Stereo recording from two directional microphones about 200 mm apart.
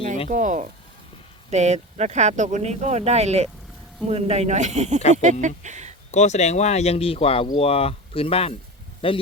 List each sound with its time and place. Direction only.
0.3 s speech: 40° right (ahead or behind)
6.1 s speech: 35° left (ahead or behind)